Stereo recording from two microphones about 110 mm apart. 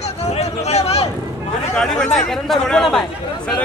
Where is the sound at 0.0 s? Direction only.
75° left (ahead or behind).